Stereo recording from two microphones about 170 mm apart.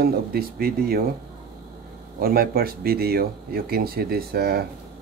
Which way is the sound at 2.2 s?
60° right (ahead or behind).